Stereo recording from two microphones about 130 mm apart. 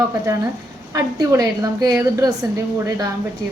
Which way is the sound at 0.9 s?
25° right (ahead or behind).